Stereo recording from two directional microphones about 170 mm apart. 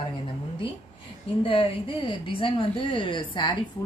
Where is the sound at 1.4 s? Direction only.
30° left (ahead or behind).